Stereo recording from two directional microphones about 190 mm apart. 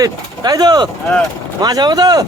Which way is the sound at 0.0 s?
20° right (ahead or behind).